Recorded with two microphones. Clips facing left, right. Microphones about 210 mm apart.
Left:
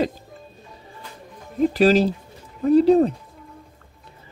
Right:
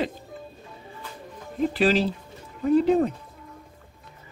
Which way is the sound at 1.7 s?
40° left (ahead or behind).